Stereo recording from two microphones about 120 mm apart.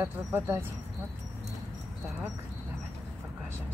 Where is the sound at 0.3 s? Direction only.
20° right (ahead or behind).